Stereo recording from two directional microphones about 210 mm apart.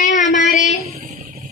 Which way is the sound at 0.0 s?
35° left (ahead or behind).